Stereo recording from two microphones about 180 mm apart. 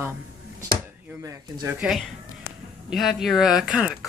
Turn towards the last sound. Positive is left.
turn(degrees=-5)  # may be behind; listen again after turning